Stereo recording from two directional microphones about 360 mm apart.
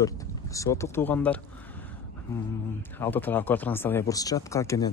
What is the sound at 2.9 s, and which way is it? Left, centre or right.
Speech, centre.